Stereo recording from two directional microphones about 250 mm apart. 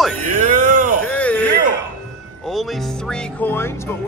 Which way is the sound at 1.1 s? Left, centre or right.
Centre.